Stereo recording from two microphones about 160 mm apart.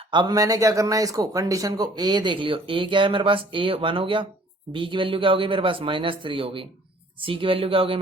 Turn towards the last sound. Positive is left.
turn(degrees=-35)  # may be behind; listen again after turning